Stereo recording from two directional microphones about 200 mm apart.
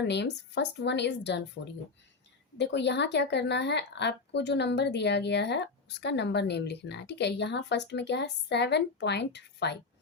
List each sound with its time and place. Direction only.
0.0 s a woman's voice: 60° left (ahead or behind)
2.6 s a woman's voice: 60° left (ahead or behind)